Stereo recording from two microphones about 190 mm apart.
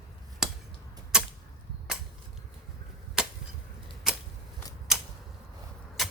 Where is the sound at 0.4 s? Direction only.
5° right (ahead or behind).